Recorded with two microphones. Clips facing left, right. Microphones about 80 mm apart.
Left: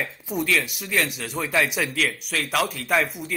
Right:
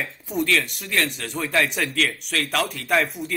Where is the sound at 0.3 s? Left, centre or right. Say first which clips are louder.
Right 2 dB; centre.